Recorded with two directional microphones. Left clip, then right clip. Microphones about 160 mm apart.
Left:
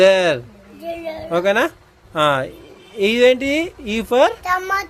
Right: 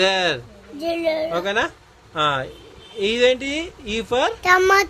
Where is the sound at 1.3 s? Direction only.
50° left (ahead or behind).